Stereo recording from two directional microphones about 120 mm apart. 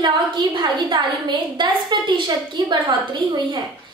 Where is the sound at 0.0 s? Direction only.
40° right (ahead or behind).